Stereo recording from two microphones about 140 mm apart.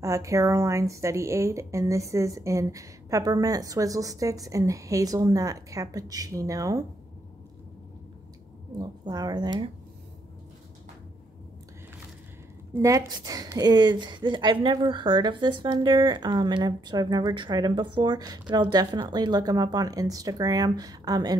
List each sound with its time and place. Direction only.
0.0 s a woman's voice: 20° right (ahead or behind)
8.7 s a woman's voice: 30° right (ahead or behind)
12.7 s a woman's voice: 20° right (ahead or behind)